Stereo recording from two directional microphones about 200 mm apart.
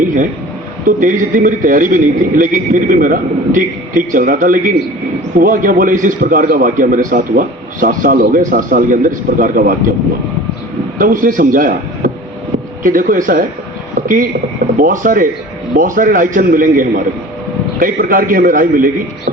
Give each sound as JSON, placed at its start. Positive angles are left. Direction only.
{"t": 0.0, "sound": "a man's voice", "side_deg": -40}
{"t": 11.0, "sound": "a man's voice", "side_deg": -40}
{"t": 13.9, "sound": "a sound", "side_deg": -40}
{"t": 14.8, "sound": "a man's voice", "side_deg": -45}